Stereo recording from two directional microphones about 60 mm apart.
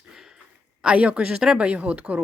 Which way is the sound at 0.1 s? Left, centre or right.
Centre.